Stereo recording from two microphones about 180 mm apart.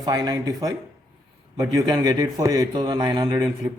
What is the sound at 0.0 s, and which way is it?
A man's voice, 20° right (ahead or behind).